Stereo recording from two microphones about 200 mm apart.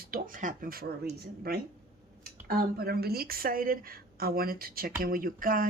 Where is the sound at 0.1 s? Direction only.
40° right (ahead or behind).